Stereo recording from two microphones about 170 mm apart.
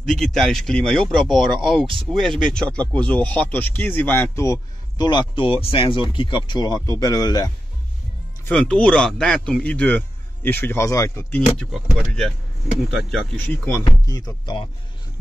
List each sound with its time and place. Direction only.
0.0 s speech: centre (ahead or behind); by 7.5 s 20° left (ahead or behind)
8.5 s speech: 10° left (ahead or behind)
11.5 s speech: centre (ahead or behind)
13.5 s speech: 10° left (ahead or behind)